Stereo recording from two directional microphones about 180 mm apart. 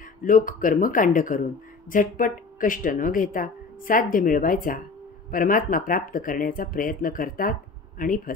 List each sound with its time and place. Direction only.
0.2 s speech: 50° left (ahead or behind)